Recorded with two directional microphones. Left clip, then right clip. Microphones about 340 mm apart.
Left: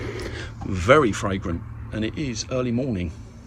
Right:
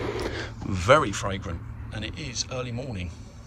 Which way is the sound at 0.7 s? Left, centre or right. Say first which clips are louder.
Left 3 dB; centre.